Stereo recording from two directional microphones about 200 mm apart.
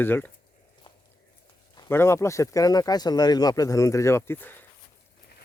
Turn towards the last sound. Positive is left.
turn(degrees=10)  # may be behind; listen again after turning